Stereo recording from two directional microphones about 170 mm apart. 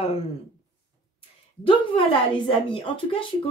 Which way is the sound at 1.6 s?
30° left (ahead or behind).